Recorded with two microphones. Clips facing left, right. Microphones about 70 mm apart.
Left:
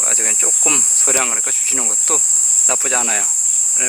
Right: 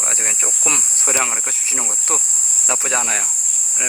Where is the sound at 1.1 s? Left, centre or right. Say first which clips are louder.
Left 1 dB; centre.